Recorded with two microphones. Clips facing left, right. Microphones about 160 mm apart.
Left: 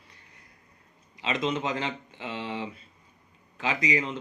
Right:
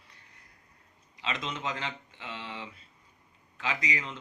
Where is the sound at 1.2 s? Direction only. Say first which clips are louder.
Left 7 dB; 15° left (ahead or behind).